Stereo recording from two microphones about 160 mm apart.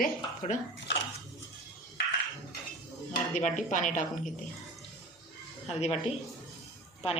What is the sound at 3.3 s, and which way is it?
Speech, 50° left (ahead or behind).